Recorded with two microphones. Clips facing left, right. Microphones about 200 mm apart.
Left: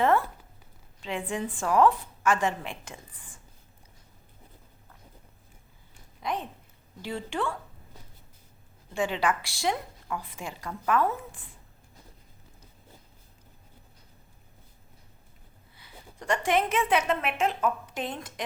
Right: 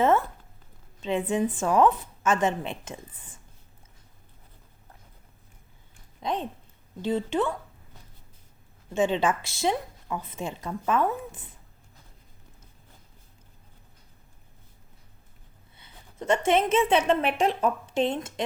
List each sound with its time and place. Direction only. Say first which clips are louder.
0.0 s a sound: right 2 dB; 20° right (ahead or behind)
1.0 s a woman's voice: right 6 dB; 20° right (ahead or behind)
6.2 s a woman's voice: right 3 dB; 25° right (ahead or behind)
8.9 s a woman's voice: right 4 dB; 20° right (ahead or behind)
15.8 s a woman's voice: right 6 dB; 25° right (ahead or behind)